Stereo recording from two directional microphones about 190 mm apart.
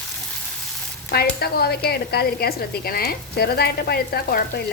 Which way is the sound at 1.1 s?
55° left (ahead or behind).